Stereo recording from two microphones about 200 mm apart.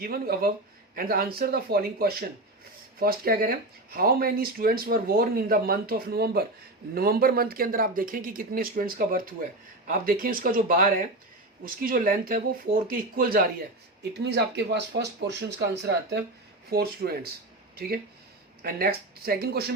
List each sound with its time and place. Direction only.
0.0 s speech: 50° right (ahead or behind)